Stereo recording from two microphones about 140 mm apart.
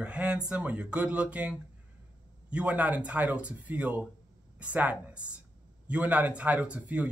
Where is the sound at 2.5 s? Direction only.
10° right (ahead or behind).